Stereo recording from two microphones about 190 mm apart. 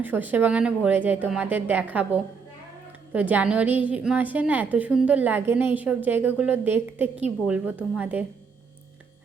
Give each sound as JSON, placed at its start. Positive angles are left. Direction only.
{"t": 0.0, "sound": "a woman's voice", "side_deg": -10}